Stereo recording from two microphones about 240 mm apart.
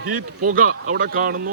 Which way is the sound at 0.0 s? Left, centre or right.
Right.